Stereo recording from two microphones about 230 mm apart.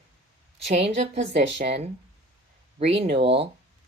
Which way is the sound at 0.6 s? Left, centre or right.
Right.